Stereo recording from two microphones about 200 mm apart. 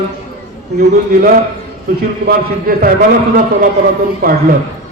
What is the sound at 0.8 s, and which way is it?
A man's voice, 50° right (ahead or behind).